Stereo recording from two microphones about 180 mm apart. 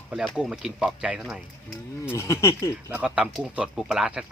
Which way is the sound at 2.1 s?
15° left (ahead or behind).